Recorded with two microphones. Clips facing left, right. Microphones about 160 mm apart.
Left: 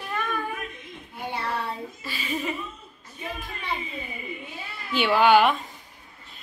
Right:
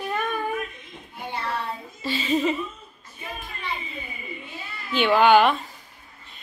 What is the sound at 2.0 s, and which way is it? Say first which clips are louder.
Speech: right 12 dB; 25° right (ahead or behind).